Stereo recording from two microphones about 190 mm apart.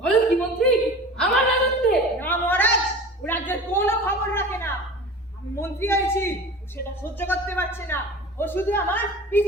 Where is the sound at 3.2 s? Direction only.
10° left (ahead or behind).